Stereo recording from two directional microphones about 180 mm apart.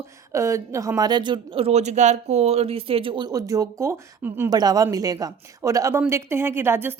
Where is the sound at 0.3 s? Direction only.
15° right (ahead or behind).